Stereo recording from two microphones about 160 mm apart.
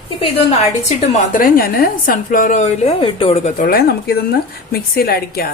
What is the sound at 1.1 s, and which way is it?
A woman's voice, 60° left (ahead or behind).